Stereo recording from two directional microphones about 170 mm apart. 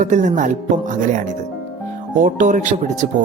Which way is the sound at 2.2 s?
50° right (ahead or behind).